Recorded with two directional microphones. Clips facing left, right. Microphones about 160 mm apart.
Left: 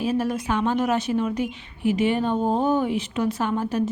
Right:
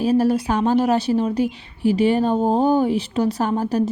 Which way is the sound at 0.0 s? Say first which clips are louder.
Right 6 dB; 35° right (ahead or behind).